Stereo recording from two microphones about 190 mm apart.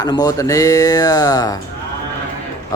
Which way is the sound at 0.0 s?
20° left (ahead or behind).